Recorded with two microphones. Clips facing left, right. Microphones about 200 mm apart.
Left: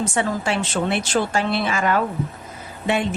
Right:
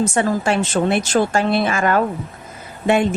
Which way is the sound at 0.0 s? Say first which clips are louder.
Right 4 dB; 45° right (ahead or behind).